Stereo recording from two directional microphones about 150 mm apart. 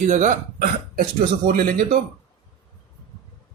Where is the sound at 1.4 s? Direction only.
70° right (ahead or behind).